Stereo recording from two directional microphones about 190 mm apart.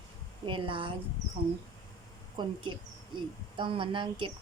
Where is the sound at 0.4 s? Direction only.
25° right (ahead or behind).